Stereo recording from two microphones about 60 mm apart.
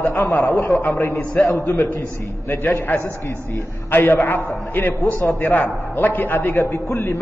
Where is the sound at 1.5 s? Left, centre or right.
Left.